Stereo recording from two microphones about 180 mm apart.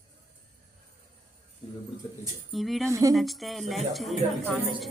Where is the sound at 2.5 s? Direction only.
Centre (ahead or behind).